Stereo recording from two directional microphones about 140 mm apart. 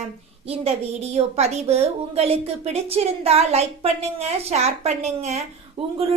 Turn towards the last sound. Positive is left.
turn(degrees=-45)  # may be behind; listen again after turning